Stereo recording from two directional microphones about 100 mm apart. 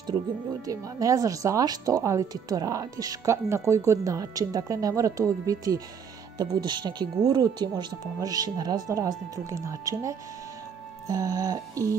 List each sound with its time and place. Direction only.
0.7 s speech: 35° right (ahead or behind)